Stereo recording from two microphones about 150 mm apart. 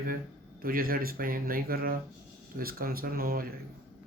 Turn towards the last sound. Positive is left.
turn(degrees=-80)